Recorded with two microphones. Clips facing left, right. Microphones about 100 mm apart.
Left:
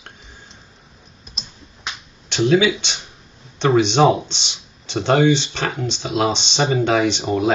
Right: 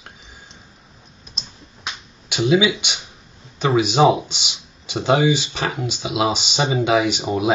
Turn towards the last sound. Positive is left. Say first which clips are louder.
# left 2 dB
turn(degrees=-5)  # may be behind; listen again after turning